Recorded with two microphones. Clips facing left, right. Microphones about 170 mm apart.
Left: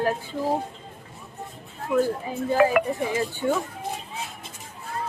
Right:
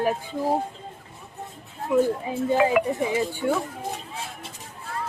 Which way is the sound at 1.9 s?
20° right (ahead or behind).